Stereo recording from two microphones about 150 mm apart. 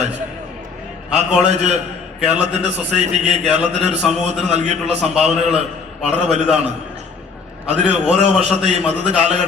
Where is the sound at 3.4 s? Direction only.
5° right (ahead or behind).